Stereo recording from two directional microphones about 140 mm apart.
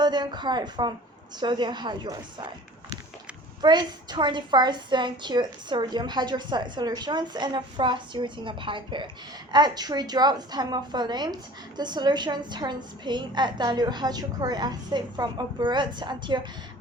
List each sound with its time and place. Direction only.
0.0 s a woman's voice: 30° right (ahead or behind)
3.6 s a woman's voice: 30° right (ahead or behind)